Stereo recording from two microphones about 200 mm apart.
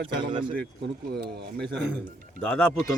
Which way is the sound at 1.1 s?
55° right (ahead or behind).